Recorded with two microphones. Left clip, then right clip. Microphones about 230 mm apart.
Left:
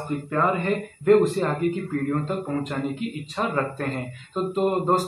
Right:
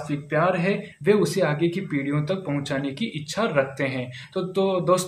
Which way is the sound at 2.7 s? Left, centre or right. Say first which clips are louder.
Right 2 dB; right.